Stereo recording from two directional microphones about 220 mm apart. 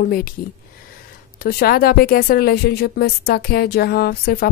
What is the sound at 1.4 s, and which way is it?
Speech, 45° left (ahead or behind).